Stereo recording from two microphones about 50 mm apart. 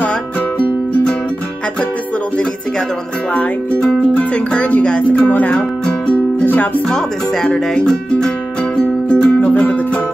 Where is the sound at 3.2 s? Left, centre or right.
Left.